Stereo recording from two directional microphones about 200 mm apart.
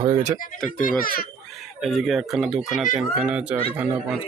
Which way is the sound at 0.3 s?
40° left (ahead or behind).